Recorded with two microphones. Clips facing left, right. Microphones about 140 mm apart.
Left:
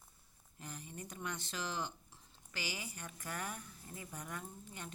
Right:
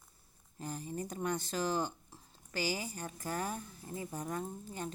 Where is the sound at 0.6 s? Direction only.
35° right (ahead or behind).